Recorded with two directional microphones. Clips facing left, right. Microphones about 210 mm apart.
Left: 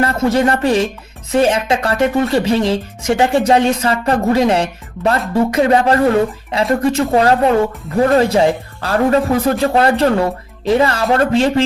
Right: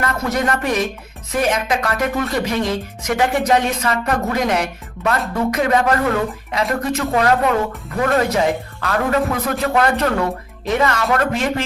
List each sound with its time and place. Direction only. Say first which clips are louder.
0.0 s speech: left 6 dB; 30° left (ahead or behind)